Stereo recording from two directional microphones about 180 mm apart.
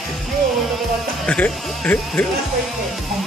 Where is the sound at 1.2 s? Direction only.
5° left (ahead or behind).